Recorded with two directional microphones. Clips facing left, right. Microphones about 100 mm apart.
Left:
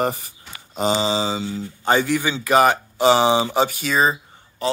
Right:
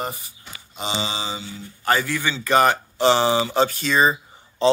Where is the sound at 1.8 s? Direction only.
20° left (ahead or behind); by 4.2 s centre (ahead or behind).